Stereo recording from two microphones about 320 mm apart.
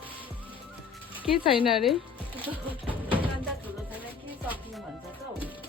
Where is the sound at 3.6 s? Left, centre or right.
Centre.